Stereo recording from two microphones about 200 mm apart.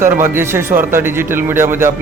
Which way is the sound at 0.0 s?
10° right (ahead or behind).